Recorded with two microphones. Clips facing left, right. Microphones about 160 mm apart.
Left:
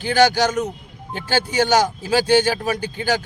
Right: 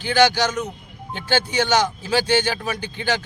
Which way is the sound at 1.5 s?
45° left (ahead or behind).